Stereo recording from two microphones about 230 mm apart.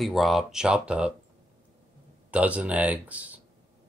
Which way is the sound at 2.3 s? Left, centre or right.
Centre.